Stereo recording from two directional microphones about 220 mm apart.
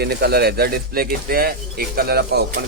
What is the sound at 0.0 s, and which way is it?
Speech, 50° right (ahead or behind).